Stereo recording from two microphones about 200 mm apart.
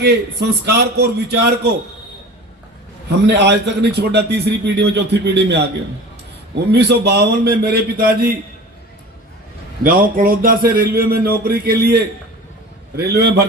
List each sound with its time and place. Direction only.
0.0 s a man's voice: 55° right (ahead or behind)
3.2 s a man's voice: 60° right (ahead or behind)
6.7 s a man's voice: 55° right (ahead or behind)
9.8 s a man's voice: 45° right (ahead or behind)
13.1 s a man's voice: 55° right (ahead or behind)